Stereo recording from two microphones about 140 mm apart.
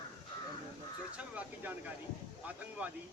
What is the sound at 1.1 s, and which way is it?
Speech, 10° right (ahead or behind).